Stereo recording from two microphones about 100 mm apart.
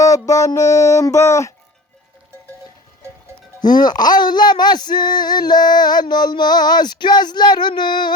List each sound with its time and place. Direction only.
0.3 s music: 35° left (ahead or behind)
3.6 s music: 45° left (ahead or behind)